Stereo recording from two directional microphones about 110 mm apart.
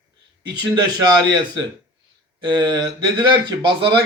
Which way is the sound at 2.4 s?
40° right (ahead or behind).